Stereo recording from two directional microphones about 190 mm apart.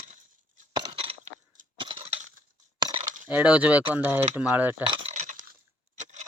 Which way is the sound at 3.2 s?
10° right (ahead or behind).